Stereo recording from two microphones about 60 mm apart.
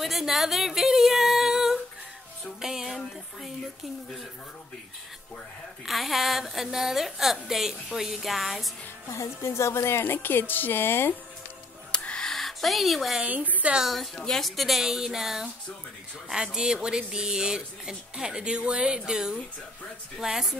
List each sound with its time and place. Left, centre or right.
0.0 s yodeling: centre
2.6 s music: centre
5.9 s a woman's voice: centre
9.1 s a woman's voice: left
11.9 s music: centre
12.3 s speech: centre
13.2 s a woman's voice: right
13.9 s a woman's voice: centre
16.5 s speech: centre